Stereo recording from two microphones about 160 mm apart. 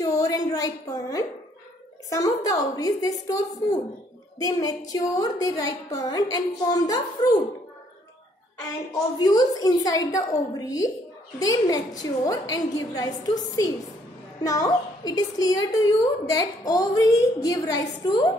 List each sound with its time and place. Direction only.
0.0 s a sound: 20° left (ahead or behind)
2.0 s a woman's voice: 20° left (ahead or behind)
9.2 s a woman's voice: 25° left (ahead or behind)